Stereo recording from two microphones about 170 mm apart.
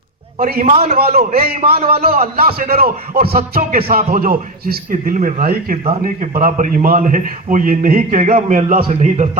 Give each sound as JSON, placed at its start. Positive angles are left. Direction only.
{"t": 0.3, "sound": "a man's voice", "side_deg": -60}
{"t": 0.6, "sound": "a man's voice", "side_deg": -40}
{"t": 0.9, "sound": "a man's voice", "side_deg": -65}